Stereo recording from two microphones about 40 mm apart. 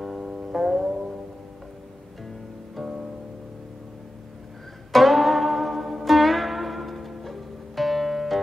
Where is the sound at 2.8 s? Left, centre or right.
Right.